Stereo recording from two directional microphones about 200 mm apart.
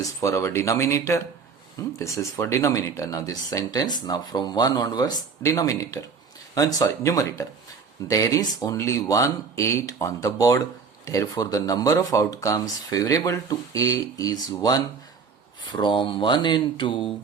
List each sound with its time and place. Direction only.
0.0 s speech: 15° left (ahead or behind)